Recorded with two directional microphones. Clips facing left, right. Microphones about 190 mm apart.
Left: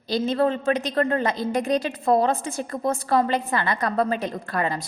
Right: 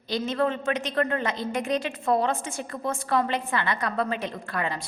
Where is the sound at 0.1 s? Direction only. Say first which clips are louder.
Left 4 dB; 35° left (ahead or behind).